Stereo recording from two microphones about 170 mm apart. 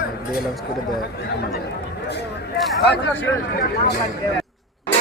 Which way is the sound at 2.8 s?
75° left (ahead or behind).